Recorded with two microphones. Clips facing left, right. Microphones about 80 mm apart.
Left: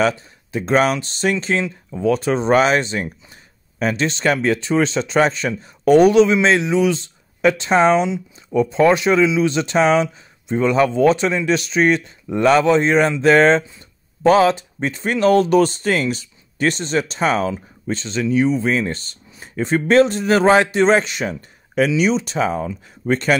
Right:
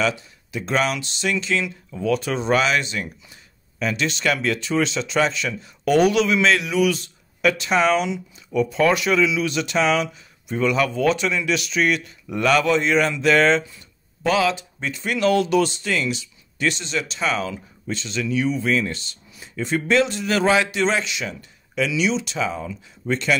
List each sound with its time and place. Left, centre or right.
0.0 s speech: left